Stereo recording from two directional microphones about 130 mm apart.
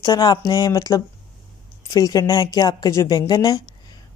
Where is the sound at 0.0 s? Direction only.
30° left (ahead or behind).